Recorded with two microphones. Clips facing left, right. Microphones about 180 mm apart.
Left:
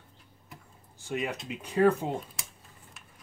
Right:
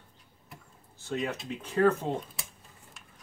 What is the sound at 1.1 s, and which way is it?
Speech, 10° left (ahead or behind).